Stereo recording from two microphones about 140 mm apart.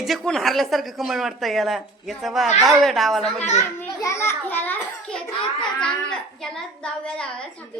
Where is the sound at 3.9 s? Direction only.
25° left (ahead or behind).